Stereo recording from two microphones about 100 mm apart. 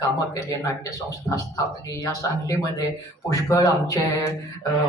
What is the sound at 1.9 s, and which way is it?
Speech, 35° left (ahead or behind).